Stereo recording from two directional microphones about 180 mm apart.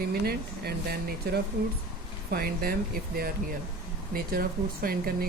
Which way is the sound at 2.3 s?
60° right (ahead or behind).